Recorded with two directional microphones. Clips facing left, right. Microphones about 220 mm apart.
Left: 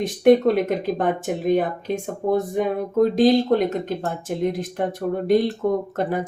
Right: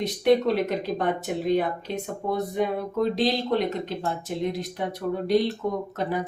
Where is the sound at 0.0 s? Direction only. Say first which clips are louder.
Left 5 dB; 50° left (ahead or behind).